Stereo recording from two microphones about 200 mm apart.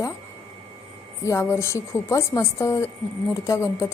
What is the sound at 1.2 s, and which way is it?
Speech, 15° left (ahead or behind).